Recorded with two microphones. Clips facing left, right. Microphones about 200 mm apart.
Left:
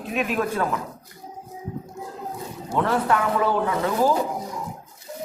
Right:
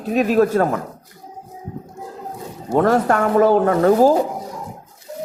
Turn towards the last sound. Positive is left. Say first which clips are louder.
# right 8 dB
turn(degrees=-45)  # may be behind; listen again after turning